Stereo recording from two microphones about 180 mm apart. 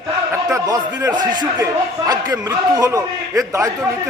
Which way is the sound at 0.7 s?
20° right (ahead or behind).